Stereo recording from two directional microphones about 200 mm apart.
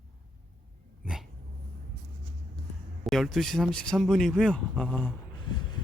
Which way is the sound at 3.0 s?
Centre (ahead or behind).